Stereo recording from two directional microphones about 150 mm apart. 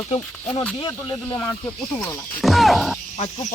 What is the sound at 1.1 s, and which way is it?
Speech, 20° left (ahead or behind).